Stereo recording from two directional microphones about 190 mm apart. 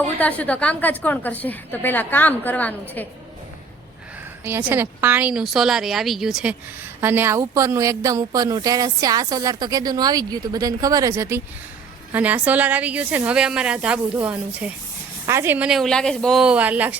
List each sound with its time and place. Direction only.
0.2 s a woman's voice: 10° left (ahead or behind)
4.4 s a woman's voice: 10° right (ahead or behind)